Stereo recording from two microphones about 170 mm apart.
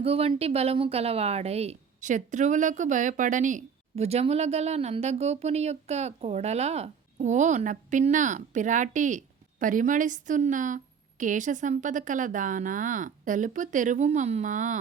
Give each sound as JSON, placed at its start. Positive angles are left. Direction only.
{"t": 0.0, "sound": "a woman's voice", "side_deg": -35}